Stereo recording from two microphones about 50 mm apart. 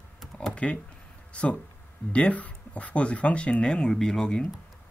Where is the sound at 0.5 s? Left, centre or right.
Left.